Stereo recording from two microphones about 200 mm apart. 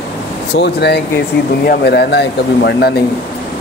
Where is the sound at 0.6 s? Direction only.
55° left (ahead or behind).